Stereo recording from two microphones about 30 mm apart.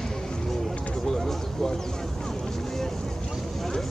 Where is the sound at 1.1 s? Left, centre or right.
Centre.